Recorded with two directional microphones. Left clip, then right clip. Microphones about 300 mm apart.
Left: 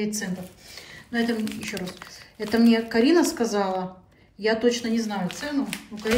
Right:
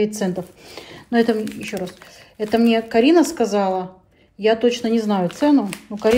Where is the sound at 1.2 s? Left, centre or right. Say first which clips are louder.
Right 7 dB; centre.